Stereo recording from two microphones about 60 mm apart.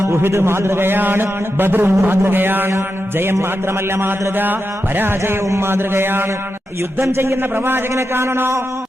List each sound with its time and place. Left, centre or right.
0.0 s a man's voice: right
7.0 s a man's voice: right
7.5 s a man's voice: right